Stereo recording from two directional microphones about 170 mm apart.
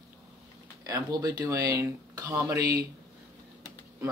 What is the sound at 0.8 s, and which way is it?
Speech, 20° right (ahead or behind).